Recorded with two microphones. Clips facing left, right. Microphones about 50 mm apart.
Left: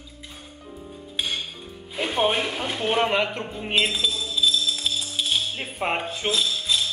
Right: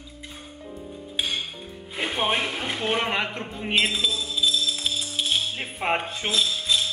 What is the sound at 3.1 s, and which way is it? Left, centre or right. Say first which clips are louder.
Speech: left 3 dB; centre.